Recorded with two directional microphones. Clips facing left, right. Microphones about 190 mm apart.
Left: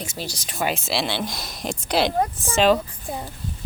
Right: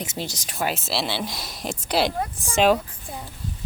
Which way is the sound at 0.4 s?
5° right (ahead or behind).